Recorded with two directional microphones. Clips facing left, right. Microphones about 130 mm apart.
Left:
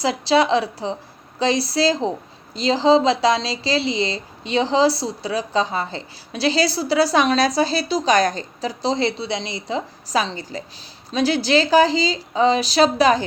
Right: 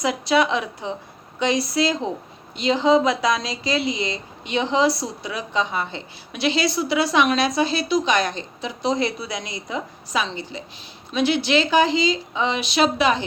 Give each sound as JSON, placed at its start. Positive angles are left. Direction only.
{"t": 0.0, "sound": "speech", "side_deg": 30}